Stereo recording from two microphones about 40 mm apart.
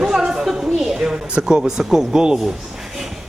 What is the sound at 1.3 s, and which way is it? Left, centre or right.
Speech, centre.